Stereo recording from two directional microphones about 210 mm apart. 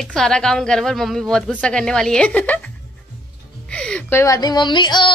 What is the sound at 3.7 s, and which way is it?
Speech, 5° left (ahead or behind).